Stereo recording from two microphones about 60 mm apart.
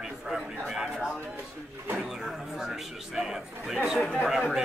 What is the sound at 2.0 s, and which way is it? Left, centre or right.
A man's voice, centre.